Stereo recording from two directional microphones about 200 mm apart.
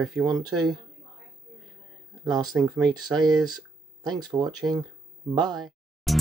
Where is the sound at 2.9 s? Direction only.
20° right (ahead or behind).